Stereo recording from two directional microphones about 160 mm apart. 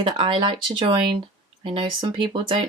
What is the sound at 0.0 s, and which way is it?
Speech, 30° right (ahead or behind).